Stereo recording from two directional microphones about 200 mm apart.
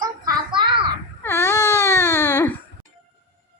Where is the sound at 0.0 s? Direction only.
20° right (ahead or behind).